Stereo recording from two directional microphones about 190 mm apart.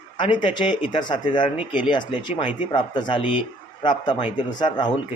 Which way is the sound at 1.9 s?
25° left (ahead or behind).